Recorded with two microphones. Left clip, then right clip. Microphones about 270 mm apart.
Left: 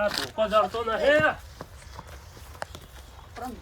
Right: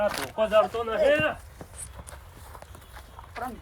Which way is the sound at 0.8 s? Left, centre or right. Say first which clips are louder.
Left 1 dB; centre.